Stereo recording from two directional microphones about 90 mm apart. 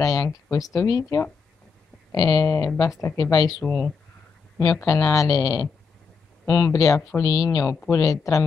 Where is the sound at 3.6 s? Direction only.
15° left (ahead or behind).